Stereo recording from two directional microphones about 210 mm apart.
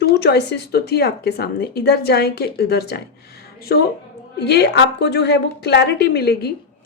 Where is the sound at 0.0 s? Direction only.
50° left (ahead or behind).